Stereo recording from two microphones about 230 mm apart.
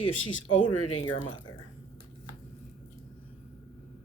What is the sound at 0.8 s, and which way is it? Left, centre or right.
Speech, left.